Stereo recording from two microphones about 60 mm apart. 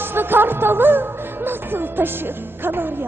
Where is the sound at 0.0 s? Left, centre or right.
Right.